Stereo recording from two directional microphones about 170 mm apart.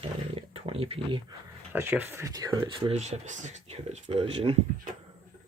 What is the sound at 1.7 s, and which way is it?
Speech, 10° right (ahead or behind).